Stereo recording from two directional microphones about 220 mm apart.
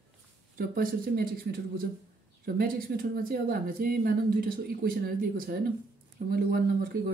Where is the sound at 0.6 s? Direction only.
40° right (ahead or behind).